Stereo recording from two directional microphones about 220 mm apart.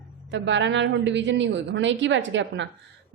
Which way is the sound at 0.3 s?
55° right (ahead or behind).